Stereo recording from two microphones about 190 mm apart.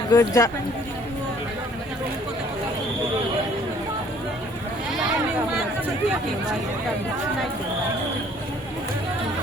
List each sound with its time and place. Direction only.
0.1 s speech: 20° left (ahead or behind)